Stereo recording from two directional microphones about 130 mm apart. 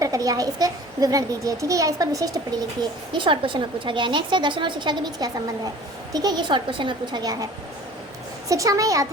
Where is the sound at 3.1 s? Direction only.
40° right (ahead or behind).